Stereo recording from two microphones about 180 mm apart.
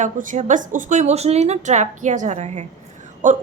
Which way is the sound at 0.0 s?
45° right (ahead or behind).